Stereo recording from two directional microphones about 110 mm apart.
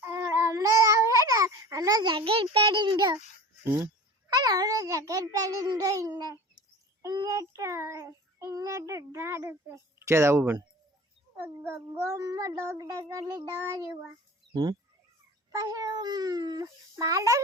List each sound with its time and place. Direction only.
0.2 s babbling: 30° right (ahead or behind)
3.6 s speech: 25° right (ahead or behind)
4.3 s a sound: 35° right (ahead or behind)
7.1 s child singing: 30° right (ahead or behind)
14.5 s speech: 40° right (ahead or behind)
15.5 s a sound: 30° right (ahead or behind)